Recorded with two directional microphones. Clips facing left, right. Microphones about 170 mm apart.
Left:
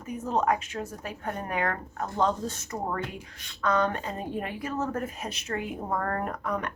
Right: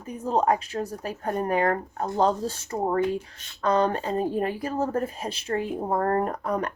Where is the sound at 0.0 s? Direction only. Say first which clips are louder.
Right 3 dB; 30° right (ahead or behind).